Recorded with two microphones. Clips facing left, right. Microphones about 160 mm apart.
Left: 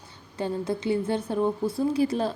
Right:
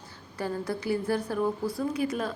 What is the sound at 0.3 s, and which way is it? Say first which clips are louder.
A woman's voice: left 3 dB; 25° left (ahead or behind).